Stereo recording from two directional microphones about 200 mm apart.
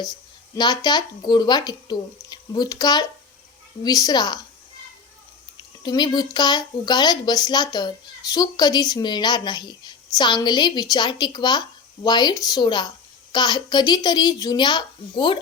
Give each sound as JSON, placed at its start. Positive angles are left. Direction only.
{"t": 0.5, "sound": "a woman's voice", "side_deg": 20}
{"t": 5.8, "sound": "a woman's voice", "side_deg": 20}